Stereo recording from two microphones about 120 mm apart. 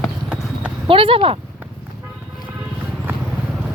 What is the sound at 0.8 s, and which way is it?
Speech, 50° right (ahead or behind).